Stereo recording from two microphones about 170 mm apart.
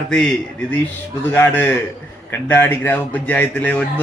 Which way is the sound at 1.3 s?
15° left (ahead or behind).